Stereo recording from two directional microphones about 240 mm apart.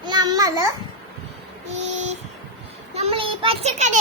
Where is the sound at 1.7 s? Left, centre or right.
Right.